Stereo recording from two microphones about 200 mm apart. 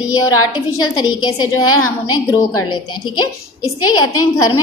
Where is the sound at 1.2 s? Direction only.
20° left (ahead or behind).